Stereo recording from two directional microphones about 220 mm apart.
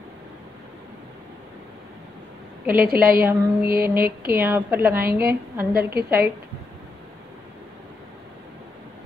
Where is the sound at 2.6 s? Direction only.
40° right (ahead or behind).